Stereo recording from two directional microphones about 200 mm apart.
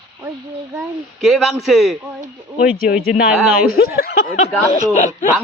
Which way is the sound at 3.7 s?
50° left (ahead or behind).